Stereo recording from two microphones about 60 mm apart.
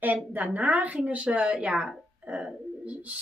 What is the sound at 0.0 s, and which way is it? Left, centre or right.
Speech, right.